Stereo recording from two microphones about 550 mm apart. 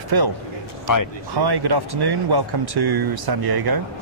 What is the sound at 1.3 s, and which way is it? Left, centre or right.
A man's voice, right.